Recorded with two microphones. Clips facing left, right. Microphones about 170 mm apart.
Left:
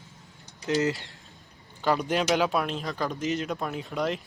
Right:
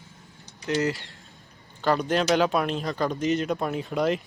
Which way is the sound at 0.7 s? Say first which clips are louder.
Even; 20° left (ahead or behind).